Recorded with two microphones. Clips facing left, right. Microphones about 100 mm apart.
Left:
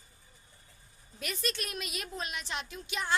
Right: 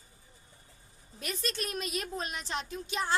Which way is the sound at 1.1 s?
35° right (ahead or behind).